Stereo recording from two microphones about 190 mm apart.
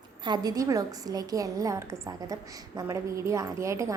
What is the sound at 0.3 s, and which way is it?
A woman's voice, 20° right (ahead or behind).